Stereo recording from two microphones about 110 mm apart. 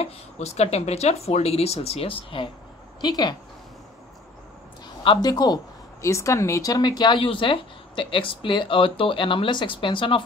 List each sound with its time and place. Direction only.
0.0 s speech: 75° left (ahead or behind); by 2.5 s 50° left (ahead or behind)
3.0 s speech: 40° left (ahead or behind)
5.0 s speech: 45° left (ahead or behind)